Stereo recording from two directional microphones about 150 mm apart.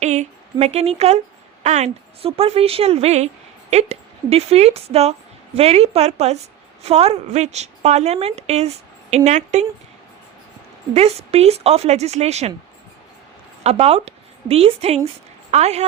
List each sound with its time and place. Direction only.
0.0 s a woman's voice: 50° right (ahead or behind)
10.9 s a woman's voice: 45° right (ahead or behind)
13.7 s a woman's voice: 45° right (ahead or behind)